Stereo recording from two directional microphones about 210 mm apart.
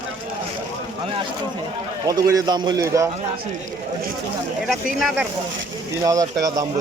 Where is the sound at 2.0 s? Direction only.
15° right (ahead or behind).